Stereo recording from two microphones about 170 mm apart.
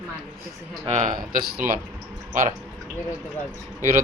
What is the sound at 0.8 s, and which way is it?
Speech, 45° right (ahead or behind).